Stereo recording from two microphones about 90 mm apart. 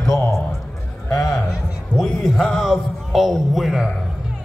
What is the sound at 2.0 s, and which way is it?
Speech, 5° left (ahead or behind).